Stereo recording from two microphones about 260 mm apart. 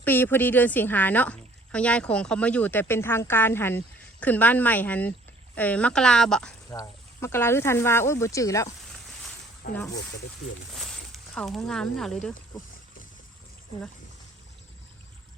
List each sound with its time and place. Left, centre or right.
0.0 s speech: centre
8.9 s a sound: centre
9.6 s speech: left
10.8 s speech: centre